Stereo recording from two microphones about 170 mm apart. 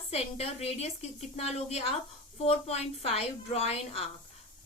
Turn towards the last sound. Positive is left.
turn(degrees=35)  # may be behind; listen again after turning